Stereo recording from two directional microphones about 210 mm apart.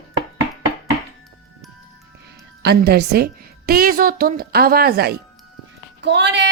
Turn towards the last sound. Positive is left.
turn(degrees=-60)  # may be behind; listen again after turning